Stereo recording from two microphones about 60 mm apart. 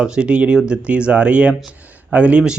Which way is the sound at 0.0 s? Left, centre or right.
Centre.